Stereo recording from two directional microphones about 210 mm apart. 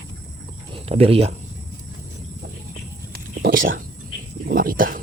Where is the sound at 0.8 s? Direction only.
30° right (ahead or behind).